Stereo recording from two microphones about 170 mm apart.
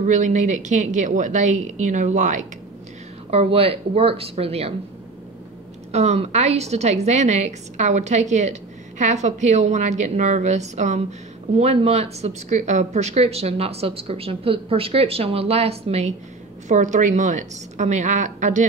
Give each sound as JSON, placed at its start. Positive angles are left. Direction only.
{"t": 0.0, "sound": "a woman's voice", "side_deg": -45}
{"t": 5.9, "sound": "a woman's voice", "side_deg": -40}